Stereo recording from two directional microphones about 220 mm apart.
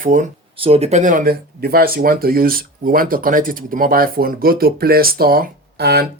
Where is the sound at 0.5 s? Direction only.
25° right (ahead or behind).